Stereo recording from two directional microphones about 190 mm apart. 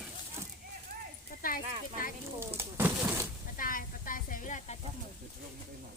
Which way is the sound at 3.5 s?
45° left (ahead or behind).